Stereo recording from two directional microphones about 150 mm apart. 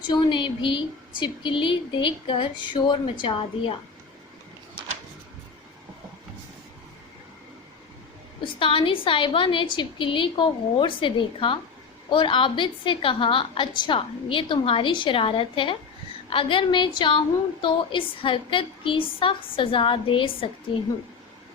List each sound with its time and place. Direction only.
0.1 s a woman's voice: 35° left (ahead or behind)
8.4 s a woman's voice: 35° left (ahead or behind)